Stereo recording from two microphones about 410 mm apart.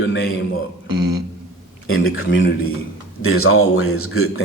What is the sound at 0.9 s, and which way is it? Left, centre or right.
Beatboxing, right.